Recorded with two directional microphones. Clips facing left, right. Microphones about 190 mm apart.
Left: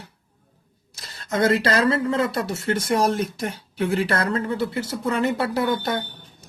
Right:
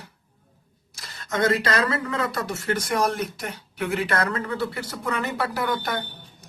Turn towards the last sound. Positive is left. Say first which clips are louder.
# left 4 dB
turn(degrees=25)  # may be behind; listen again after turning